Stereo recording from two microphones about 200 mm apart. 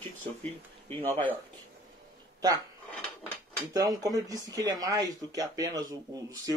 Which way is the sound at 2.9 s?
5° left (ahead or behind).